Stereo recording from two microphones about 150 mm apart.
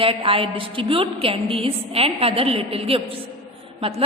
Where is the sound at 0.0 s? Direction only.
35° right (ahead or behind).